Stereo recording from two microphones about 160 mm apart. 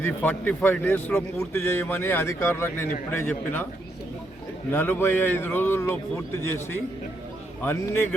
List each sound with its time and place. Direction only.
0.0 s a man's voice: 10° left (ahead or behind)
4.7 s a man's voice: 15° left (ahead or behind)